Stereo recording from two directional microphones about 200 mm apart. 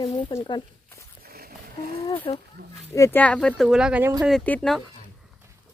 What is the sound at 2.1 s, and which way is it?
Speech, 25° left (ahead or behind).